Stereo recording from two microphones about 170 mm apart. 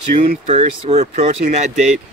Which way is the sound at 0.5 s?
40° right (ahead or behind).